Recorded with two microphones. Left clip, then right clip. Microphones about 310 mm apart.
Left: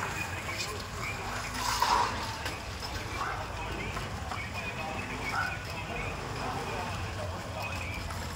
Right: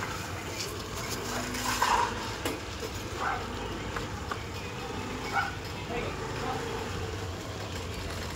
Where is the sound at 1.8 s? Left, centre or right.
Right.